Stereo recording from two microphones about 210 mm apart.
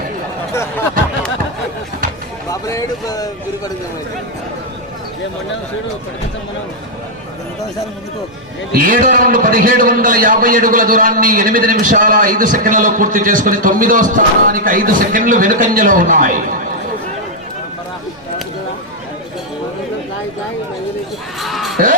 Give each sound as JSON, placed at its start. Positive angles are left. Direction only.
{"t": 2.5, "sound": "speech", "side_deg": 15}
{"t": 8.7, "sound": "a man's voice", "side_deg": -40}
{"t": 21.4, "sound": "a sound", "side_deg": 0}